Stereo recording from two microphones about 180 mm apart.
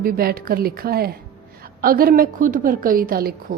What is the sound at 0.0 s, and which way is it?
A woman's voice, 55° right (ahead or behind).